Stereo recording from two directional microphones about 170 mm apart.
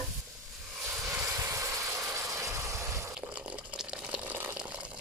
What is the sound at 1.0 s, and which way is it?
Vehicle, 15° right (ahead or behind).